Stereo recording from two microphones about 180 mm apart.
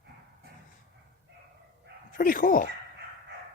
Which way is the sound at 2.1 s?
50° left (ahead or behind).